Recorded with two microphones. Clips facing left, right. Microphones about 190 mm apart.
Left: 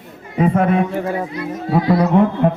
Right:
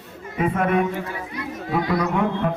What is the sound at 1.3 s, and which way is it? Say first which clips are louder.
Speech: left 6 dB; 30° left (ahead or behind).